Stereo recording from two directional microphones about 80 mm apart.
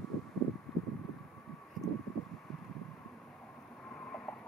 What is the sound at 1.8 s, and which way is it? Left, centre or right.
Vehicle, right.